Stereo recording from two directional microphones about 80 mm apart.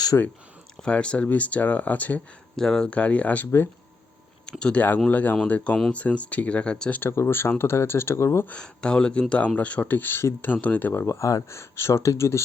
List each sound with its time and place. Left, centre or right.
0.1 s speech: left
0.9 s speech: centre
2.6 s speech: centre
4.6 s speech: centre
7.0 s speech: left
8.4 s speech: centre; by 12.4 s left